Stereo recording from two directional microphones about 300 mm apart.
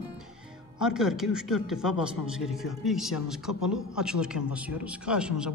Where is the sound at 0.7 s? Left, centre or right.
Centre.